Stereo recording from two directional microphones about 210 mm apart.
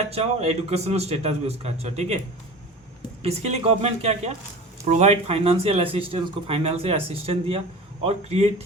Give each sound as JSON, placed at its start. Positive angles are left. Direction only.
{"t": 0.1, "sound": "a man's voice", "side_deg": -30}
{"t": 3.2, "sound": "speech", "side_deg": -30}